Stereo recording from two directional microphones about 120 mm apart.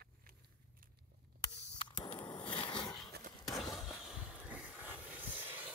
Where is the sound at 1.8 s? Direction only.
40° left (ahead or behind).